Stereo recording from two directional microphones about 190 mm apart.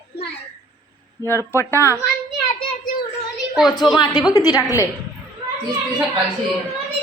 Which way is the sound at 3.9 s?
20° left (ahead or behind).